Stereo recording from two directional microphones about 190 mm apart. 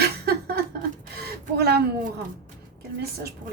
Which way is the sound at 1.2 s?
55° right (ahead or behind).